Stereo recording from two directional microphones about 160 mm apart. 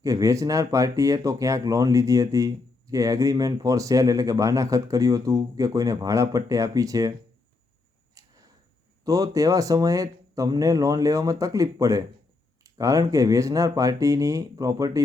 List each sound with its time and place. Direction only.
0.0 s speech: 20° right (ahead or behind)
8.2 s a sound: 20° right (ahead or behind)
9.0 s speech: 20° right (ahead or behind)